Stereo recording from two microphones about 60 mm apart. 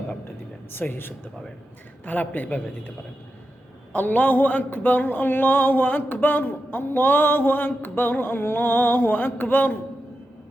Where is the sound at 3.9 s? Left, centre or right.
Left.